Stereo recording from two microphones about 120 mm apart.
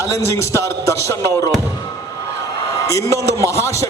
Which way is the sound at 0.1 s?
25° left (ahead or behind).